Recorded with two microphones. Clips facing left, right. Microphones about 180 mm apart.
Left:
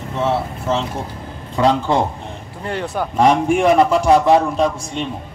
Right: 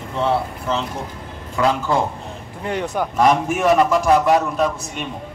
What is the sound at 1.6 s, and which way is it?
Speech, 30° left (ahead or behind).